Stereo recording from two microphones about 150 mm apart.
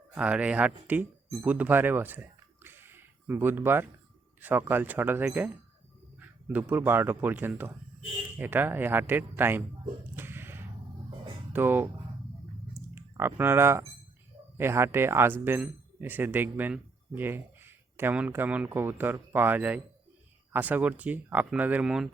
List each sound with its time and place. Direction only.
0.1 s speech: 10° right (ahead or behind)
2.6 s a sound: 15° right (ahead or behind)
4.4 s speech: 15° right (ahead or behind)
10.2 s a sound: 15° right (ahead or behind)
11.5 s speech: 15° right (ahead or behind)
12.9 s speech: 15° right (ahead or behind)